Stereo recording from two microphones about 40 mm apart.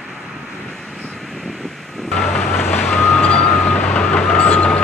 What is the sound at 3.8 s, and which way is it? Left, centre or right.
Vehicle, centre.